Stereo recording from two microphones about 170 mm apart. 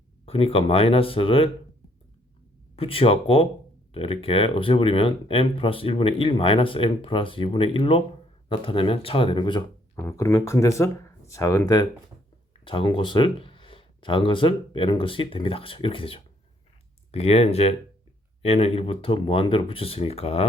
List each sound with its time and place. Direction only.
0.3 s speech: 35° left (ahead or behind)
2.7 s speech: 35° left (ahead or behind)